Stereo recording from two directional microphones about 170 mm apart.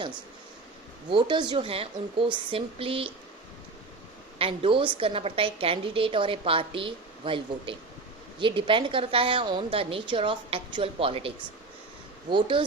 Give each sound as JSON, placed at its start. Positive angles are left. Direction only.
{"t": 1.1, "sound": "a woman's voice", "side_deg": -25}
{"t": 4.4, "sound": "a woman's voice", "side_deg": -30}